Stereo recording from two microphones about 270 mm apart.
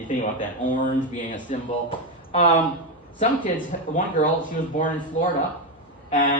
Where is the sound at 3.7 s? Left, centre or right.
Left.